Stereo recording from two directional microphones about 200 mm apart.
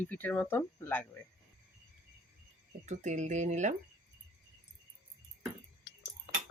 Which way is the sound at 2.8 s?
35° right (ahead or behind).